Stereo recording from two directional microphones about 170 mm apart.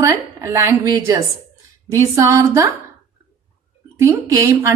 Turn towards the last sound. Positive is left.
turn(degrees=-15)  # may be behind; listen again after turning